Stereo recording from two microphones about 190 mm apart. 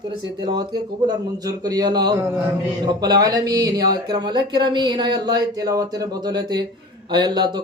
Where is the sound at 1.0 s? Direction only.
20° right (ahead or behind).